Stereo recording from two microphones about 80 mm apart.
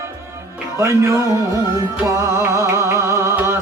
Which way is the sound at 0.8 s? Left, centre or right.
Right.